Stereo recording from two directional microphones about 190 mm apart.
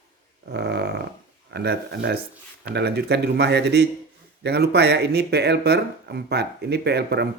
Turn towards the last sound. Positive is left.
turn(degrees=-60)  # may be behind; listen again after turning